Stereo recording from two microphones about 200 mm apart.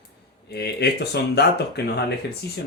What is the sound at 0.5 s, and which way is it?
Speech, 55° left (ahead or behind).